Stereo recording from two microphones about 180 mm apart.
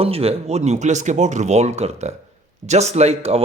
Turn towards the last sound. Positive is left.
turn(degrees=-35)  # may be behind; listen again after turning